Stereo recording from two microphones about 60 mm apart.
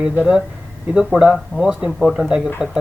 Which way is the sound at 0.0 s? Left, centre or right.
Centre.